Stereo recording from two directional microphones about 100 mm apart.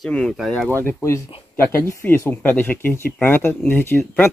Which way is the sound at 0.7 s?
20° left (ahead or behind).